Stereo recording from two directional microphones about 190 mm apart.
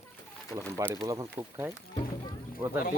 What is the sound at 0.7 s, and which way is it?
Speech, 20° right (ahead or behind).